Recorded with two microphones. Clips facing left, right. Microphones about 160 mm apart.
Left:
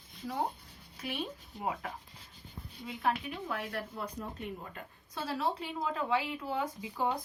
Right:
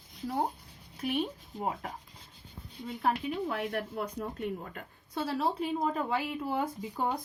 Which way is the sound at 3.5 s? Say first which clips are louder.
Right 4 dB; 50° right (ahead or behind).